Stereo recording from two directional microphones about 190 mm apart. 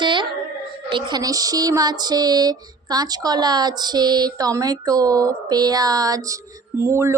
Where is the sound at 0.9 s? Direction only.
25° right (ahead or behind).